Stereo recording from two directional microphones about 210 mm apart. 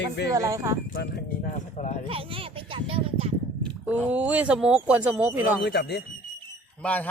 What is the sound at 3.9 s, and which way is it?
Speech, 5° right (ahead or behind).